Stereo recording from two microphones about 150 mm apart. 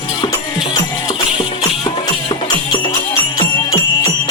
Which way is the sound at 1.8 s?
35° left (ahead or behind).